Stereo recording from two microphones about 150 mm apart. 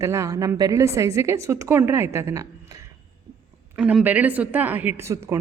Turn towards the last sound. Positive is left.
turn(degrees=-20)  # may be behind; listen again after turning